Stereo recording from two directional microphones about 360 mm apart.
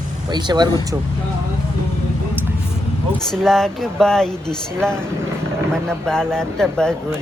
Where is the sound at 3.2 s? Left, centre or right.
Centre.